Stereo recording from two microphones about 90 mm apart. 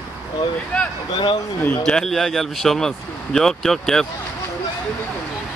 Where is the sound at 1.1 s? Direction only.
60° left (ahead or behind).